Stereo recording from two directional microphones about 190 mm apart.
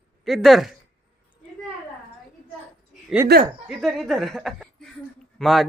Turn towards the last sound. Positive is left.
turn(degrees=0)  # may be behind; listen again after turning